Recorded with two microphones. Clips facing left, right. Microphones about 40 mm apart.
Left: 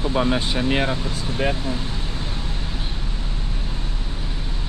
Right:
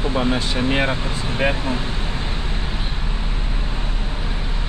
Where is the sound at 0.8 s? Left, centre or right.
Right.